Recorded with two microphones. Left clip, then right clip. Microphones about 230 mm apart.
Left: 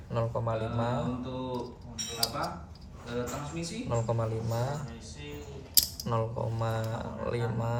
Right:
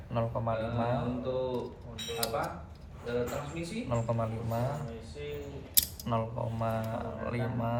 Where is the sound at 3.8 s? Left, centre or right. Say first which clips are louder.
Left 1 dB; left.